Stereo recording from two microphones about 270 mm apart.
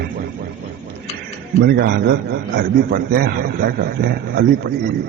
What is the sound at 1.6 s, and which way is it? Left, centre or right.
A man's voice, right.